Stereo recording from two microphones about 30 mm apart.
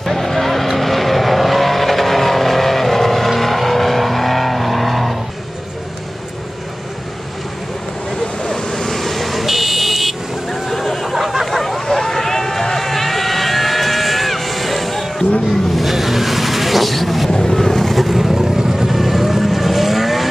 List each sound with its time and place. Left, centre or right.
0.0 s vehicle: centre
8.5 s vehicle: centre
10.5 s a sound: centre
15.7 s vehicle: centre
17.3 s vehicle: left
17.6 s boat: centre
18.0 s vehicle: centre
18.9 s vehicle: centre